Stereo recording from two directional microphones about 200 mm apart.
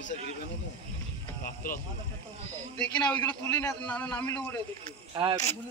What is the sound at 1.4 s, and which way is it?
Speech, 45° left (ahead or behind).